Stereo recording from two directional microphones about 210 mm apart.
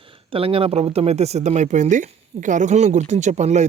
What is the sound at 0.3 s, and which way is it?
Speech, 25° right (ahead or behind).